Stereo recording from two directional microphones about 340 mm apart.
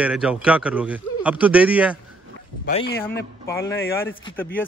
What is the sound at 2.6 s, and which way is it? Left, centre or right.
Speech, left.